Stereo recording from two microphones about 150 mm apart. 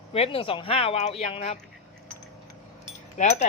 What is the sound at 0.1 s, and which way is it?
Speech, 40° left (ahead or behind).